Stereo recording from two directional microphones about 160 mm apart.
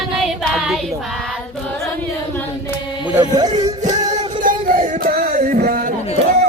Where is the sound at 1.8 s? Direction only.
10° left (ahead or behind).